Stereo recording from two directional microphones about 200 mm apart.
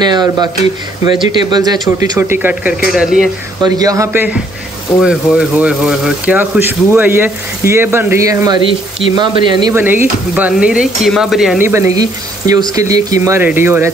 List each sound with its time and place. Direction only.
0.0 s speech: 20° right (ahead or behind); by 3.3 s centre (ahead or behind)
3.6 s speech: 20° right (ahead or behind)